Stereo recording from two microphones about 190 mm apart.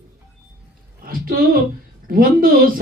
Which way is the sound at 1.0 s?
50° right (ahead or behind).